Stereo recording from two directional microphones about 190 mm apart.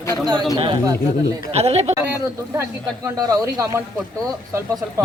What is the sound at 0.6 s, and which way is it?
A man's voice, 25° right (ahead or behind).